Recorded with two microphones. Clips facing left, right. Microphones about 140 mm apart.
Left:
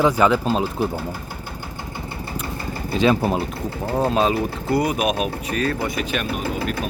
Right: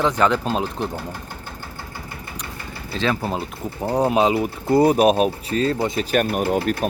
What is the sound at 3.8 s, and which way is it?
Speech, 15° right (ahead or behind).